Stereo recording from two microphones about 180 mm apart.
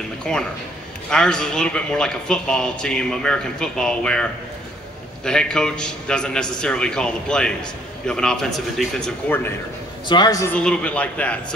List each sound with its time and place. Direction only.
0.2 s speech: 5° left (ahead or behind)
10.0 s a man's voice: 25° left (ahead or behind)
10.5 s a man's voice: 5° left (ahead or behind)